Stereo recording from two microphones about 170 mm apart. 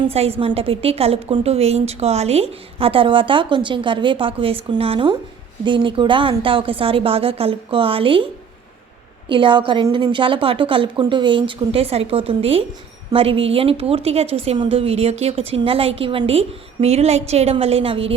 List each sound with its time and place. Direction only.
0.1 s a woman's voice: 35° right (ahead or behind)
9.3 s a woman's voice: 30° right (ahead or behind)